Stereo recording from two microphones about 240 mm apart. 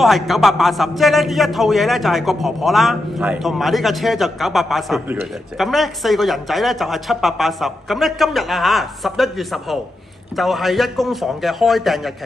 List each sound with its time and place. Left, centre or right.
0.0 s a man's voice: centre